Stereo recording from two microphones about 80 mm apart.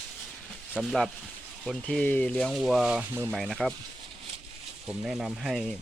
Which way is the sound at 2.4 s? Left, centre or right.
Centre.